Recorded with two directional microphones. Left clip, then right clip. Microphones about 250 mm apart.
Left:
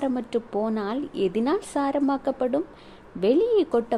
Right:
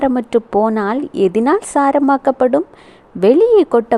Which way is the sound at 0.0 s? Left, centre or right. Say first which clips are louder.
Right 12 dB; right.